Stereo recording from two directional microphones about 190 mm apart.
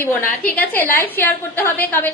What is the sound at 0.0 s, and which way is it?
A woman's voice, 10° left (ahead or behind).